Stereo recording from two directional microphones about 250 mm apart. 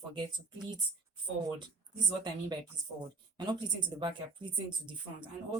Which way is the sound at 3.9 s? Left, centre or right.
Centre.